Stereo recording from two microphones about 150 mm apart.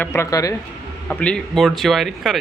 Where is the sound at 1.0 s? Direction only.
10° left (ahead or behind).